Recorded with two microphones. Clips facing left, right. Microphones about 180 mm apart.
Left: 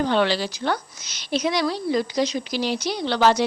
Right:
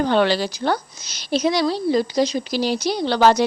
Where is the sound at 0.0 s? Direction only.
45° right (ahead or behind).